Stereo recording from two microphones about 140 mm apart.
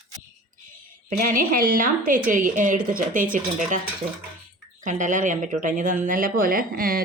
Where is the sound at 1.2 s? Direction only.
90° right.